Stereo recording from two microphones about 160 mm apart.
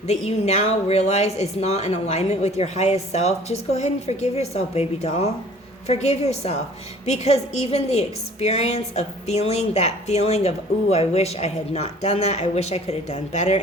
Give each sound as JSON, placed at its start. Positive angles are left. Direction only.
{"t": 0.1, "sound": "a woman's voice", "side_deg": 45}